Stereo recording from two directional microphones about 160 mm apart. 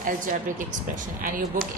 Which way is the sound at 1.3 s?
60° right (ahead or behind).